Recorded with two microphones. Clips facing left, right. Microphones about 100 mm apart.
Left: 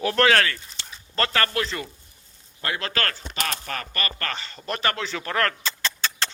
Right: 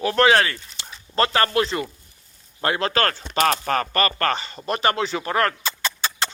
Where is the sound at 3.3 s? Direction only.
50° right (ahead or behind).